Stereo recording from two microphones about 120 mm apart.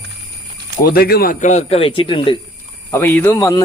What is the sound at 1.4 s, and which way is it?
Speech, 70° left (ahead or behind).